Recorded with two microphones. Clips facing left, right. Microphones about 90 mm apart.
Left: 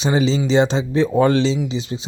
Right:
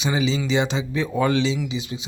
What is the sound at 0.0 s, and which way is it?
Speech, 35° left (ahead or behind).